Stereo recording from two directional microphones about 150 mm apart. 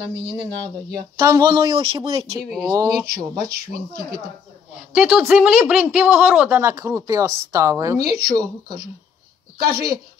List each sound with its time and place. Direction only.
1.2 s speech: 25° right (ahead or behind)
3.4 s speech: 90° right
4.9 s a man's voice: 5° right (ahead or behind)
8.1 s speech: 85° right
9.6 s speech: 90° right